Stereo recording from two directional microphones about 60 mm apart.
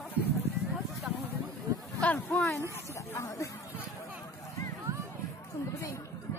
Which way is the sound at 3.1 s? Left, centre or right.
Left.